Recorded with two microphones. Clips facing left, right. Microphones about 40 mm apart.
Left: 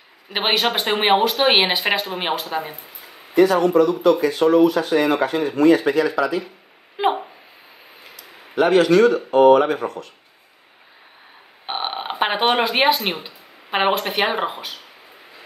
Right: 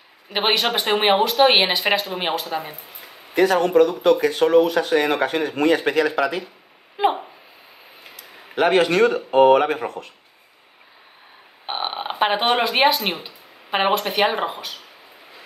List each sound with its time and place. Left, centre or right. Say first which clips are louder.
0.3 s speech: even; centre
3.3 s speech: left 1 dB; right
7.0 s speech: even; centre
8.2 s speech: left 1 dB; right
11.6 s speech: even; centre